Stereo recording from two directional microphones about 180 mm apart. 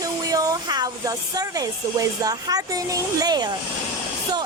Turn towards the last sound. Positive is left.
turn(degrees=-20)  # may be behind; listen again after turning